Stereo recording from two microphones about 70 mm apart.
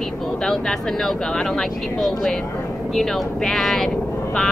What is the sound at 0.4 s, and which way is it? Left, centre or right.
Speech, centre.